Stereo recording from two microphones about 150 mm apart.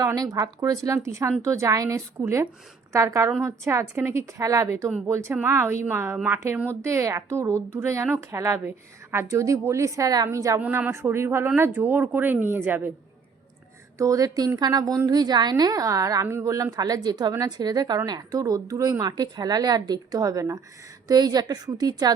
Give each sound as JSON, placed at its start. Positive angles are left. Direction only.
{"t": 0.0, "sound": "a woman's voice", "side_deg": -25}
{"t": 14.0, "sound": "a woman's voice", "side_deg": -25}